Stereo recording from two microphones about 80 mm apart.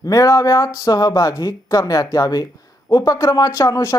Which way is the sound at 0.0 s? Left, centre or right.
Left.